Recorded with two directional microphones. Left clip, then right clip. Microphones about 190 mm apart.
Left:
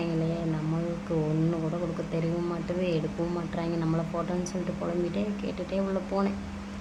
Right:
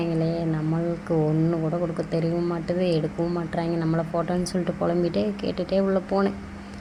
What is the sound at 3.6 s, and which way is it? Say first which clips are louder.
Speech: right 5 dB; 25° right (ahead or behind).